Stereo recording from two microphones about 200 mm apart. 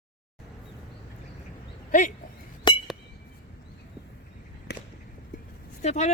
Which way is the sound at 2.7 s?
25° left (ahead or behind).